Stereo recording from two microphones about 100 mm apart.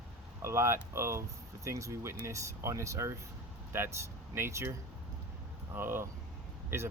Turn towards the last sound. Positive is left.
turn(degrees=-25)  # may be behind; listen again after turning